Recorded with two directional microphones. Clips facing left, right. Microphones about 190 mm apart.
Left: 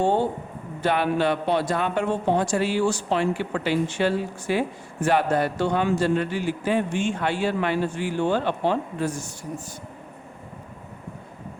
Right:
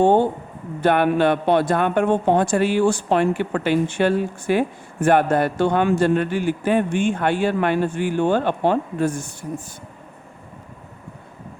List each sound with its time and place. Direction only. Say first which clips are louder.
0.0 s a man's voice: right 6 dB; 55° right (ahead or behind)